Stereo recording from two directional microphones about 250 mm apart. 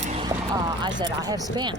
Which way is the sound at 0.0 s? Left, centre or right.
Right.